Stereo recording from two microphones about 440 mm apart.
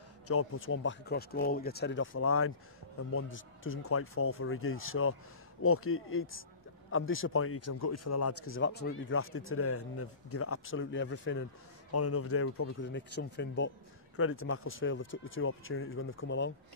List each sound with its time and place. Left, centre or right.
0.3 s speech: left